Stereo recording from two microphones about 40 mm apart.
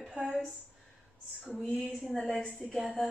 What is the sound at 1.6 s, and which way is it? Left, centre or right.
A woman's voice, centre.